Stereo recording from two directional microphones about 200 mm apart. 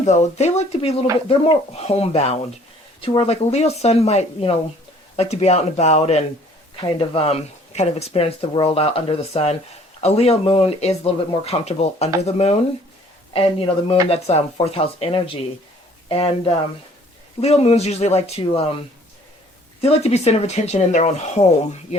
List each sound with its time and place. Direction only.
0.0 s speech: 35° left (ahead or behind)
19.8 s speech: 30° left (ahead or behind)